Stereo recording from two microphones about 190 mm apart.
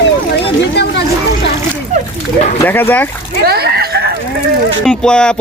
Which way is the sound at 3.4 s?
55° right (ahead or behind).